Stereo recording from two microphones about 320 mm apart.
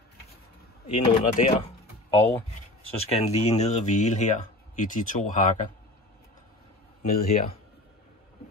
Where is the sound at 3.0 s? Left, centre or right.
Centre.